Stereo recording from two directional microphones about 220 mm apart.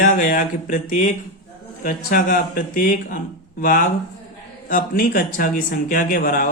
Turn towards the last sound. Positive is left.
turn(degrees=40)  # may be behind; listen again after turning